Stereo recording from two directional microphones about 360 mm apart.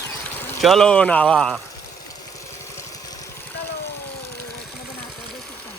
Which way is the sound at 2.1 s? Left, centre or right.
Centre.